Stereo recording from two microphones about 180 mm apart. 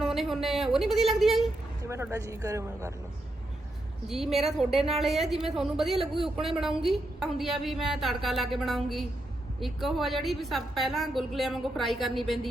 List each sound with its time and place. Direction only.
0.0 s a woman's voice: centre (ahead or behind)
1.9 s speech: 15° right (ahead or behind)
4.1 s a woman's voice: centre (ahead or behind)